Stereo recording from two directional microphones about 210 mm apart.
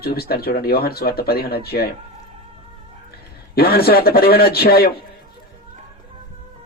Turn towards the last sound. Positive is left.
turn(degrees=50)  # may be behind; listen again after turning